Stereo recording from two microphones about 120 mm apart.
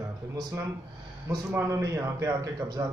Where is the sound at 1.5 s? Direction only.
25° right (ahead or behind).